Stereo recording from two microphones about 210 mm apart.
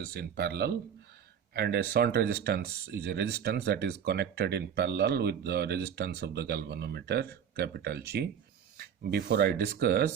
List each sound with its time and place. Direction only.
0.0 s speech: 50° right (ahead or behind)